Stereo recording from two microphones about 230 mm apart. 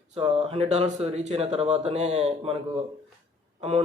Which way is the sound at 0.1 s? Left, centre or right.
Right.